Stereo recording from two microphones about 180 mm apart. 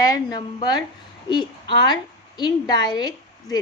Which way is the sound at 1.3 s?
25° left (ahead or behind).